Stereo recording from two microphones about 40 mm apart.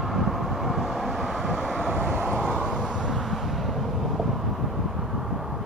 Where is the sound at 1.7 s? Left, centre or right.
Centre.